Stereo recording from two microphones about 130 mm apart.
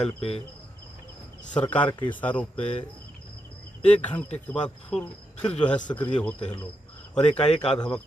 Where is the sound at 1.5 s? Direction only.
10° left (ahead or behind).